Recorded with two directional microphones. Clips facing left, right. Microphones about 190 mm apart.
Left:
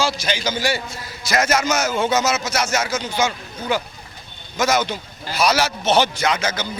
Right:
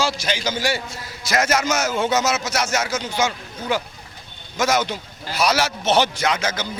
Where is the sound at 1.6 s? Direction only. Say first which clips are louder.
Left 1 dB; 25° left (ahead or behind).